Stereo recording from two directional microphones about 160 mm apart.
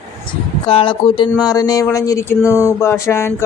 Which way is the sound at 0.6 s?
35° left (ahead or behind).